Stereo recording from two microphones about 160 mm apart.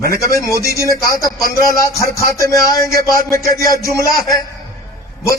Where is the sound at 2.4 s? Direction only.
20° left (ahead or behind).